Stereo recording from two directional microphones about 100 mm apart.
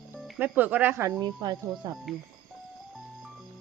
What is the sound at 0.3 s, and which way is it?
Speech, 15° right (ahead or behind).